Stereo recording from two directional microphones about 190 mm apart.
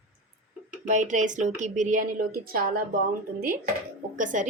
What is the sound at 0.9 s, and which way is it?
A woman's voice, 40° right (ahead or behind).